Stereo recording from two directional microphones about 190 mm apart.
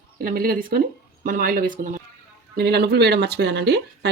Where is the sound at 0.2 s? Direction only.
50° right (ahead or behind).